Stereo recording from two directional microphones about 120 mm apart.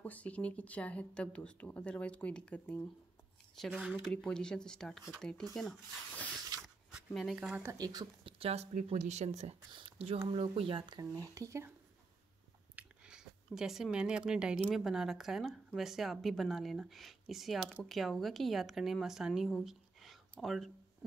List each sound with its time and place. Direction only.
0.0 s speech: 10° left (ahead or behind)
3.5 s speech: centre (ahead or behind)
7.6 s speech: 30° right (ahead or behind)
8.2 s speech: 50° right (ahead or behind)
9.7 s speech: 45° right (ahead or behind)
11.0 s speech: 30° right (ahead or behind)
12.7 s a sound: 5° right (ahead or behind)
14.7 s speech: 5° right (ahead or behind)